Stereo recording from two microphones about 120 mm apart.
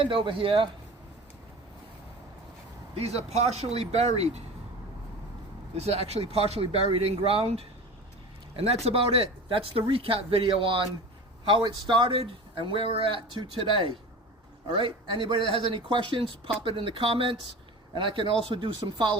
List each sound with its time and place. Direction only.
0.0 s speech: 45° right (ahead or behind)
2.9 s speech: 60° right (ahead or behind)
5.7 s speech: 60° right (ahead or behind)